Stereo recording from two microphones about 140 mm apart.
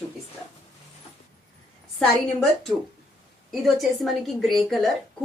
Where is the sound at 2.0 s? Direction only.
5° left (ahead or behind).